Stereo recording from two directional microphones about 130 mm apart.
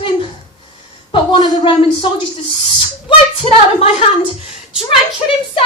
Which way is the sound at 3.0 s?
45° left (ahead or behind).